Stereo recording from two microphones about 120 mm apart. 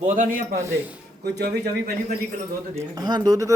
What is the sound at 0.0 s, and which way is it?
Speech, 90° right.